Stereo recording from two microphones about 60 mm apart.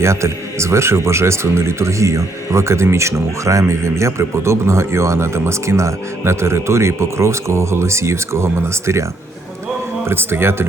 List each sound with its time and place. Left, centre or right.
0.0 s speech: right
10.1 s speech: right